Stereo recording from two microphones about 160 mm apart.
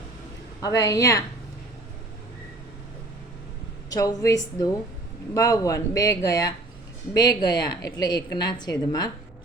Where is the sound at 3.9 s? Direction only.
20° left (ahead or behind).